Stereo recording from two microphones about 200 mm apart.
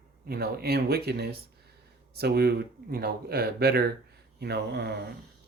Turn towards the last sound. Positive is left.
turn(degrees=-55)  # may be behind; listen again after turning